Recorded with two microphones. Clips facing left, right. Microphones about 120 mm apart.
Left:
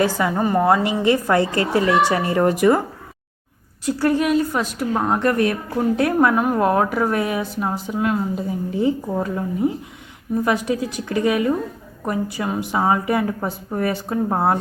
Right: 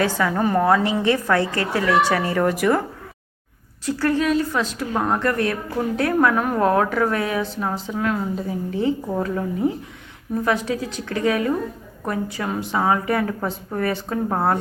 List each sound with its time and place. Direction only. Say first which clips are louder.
0.0 s a woman's voice: left 1 dB; 15° left (ahead or behind)
3.8 s a woman's voice: left 2 dB; 15° left (ahead or behind)
5.2 s a woman's voice: left 3 dB; 20° left (ahead or behind)